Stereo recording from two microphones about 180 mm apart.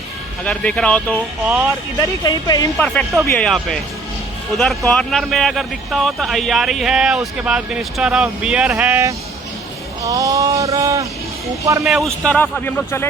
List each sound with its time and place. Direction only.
0.4 s speech: 5° left (ahead or behind)
2.2 s speech: 20° left (ahead or behind)
2.7 s speech: 5° left (ahead or behind); by 11.0 s 15° right (ahead or behind)
11.8 s speech: centre (ahead or behind)